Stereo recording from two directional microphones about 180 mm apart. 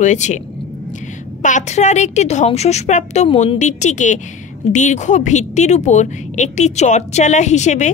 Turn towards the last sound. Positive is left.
turn(degrees=40)  # may be behind; listen again after turning